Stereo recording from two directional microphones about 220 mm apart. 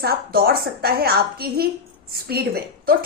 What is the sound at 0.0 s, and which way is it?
A woman's voice, 45° right (ahead or behind).